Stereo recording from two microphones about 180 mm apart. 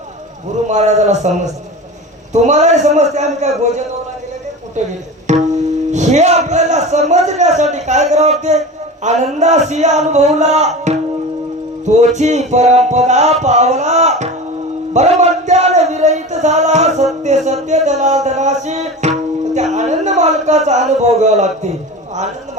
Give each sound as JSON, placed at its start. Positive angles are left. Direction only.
{"t": 0.7, "sound": "music", "side_deg": -40}
{"t": 4.8, "sound": "speech", "side_deg": -40}
{"t": 5.3, "sound": "tabla", "side_deg": -40}
{"t": 5.9, "sound": "music", "side_deg": -40}